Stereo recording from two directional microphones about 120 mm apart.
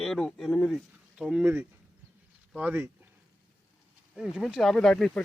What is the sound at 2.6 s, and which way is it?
Speech, 15° right (ahead or behind).